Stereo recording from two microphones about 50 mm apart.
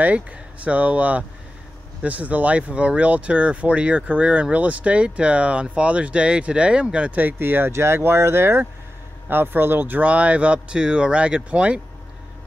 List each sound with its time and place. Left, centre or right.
0.0 s speech: right
7.2 s speech: right
9.3 s speech: right
10.0 s speech: right